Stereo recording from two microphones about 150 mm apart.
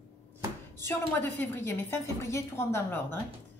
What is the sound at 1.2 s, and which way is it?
A woman's voice, 15° left (ahead or behind).